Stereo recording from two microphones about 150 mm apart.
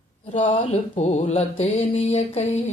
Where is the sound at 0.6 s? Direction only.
45° left (ahead or behind).